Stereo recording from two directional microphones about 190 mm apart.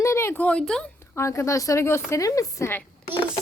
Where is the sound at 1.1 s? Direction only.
15° left (ahead or behind).